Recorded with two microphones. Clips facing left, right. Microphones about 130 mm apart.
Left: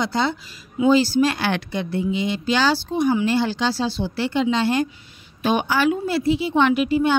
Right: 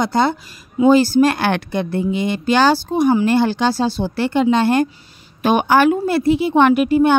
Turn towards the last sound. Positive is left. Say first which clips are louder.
# right 5 dB
turn(degrees=-50)  # may be behind; listen again after turning